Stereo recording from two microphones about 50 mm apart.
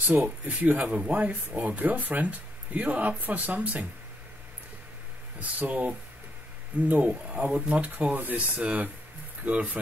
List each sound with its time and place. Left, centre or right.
0.0 s speech: right
0.6 s speech: right
5.4 s speech: right